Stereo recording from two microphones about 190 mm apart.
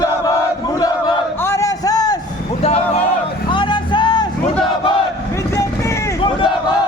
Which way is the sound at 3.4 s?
25° left (ahead or behind).